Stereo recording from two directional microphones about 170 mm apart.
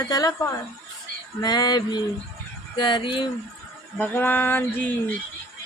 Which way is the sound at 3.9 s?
10° left (ahead or behind).